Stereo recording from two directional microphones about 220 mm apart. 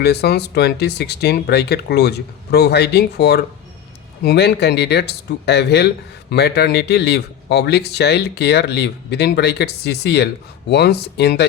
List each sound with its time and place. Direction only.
0.0 s speech: 50° left (ahead or behind)